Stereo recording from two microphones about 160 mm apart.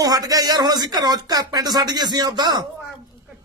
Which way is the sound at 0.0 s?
25° right (ahead or behind).